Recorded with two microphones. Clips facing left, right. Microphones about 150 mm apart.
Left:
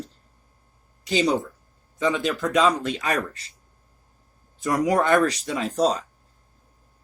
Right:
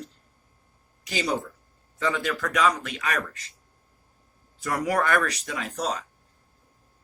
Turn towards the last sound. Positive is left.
turn(degrees=30)  # may be behind; listen again after turning